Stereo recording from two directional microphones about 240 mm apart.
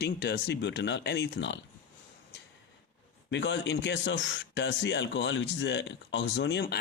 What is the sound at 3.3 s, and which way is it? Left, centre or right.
A man's voice, left.